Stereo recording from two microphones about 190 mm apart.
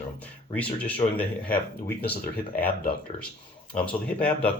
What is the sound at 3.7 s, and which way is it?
Speech, 5° left (ahead or behind).